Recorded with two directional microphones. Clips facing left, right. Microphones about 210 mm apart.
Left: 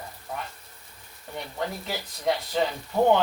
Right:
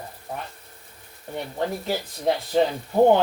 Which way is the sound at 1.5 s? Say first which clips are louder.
Right 6 dB; 35° right (ahead or behind).